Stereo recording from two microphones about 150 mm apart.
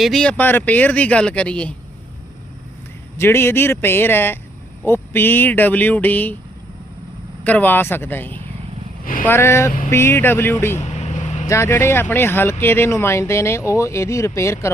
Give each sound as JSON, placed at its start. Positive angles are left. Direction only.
{"t": 0.0, "sound": "speech", "side_deg": 5}
{"t": 3.2, "sound": "speech", "side_deg": 15}
{"t": 7.4, "sound": "speech", "side_deg": 10}
{"t": 10.8, "sound": "vehicle", "side_deg": 50}
{"t": 11.4, "sound": "speech", "side_deg": 20}